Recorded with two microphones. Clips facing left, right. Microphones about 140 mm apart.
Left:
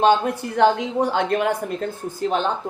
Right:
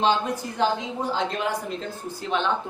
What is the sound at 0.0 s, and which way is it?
Speech, 60° left (ahead or behind).